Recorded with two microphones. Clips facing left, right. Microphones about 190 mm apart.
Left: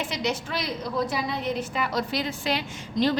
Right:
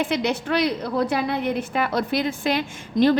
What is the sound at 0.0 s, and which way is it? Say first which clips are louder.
A woman's voice: right 6 dB; 60° right (ahead or behind).